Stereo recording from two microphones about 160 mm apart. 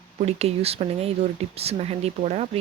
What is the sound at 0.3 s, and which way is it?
Speech, 40° right (ahead or behind).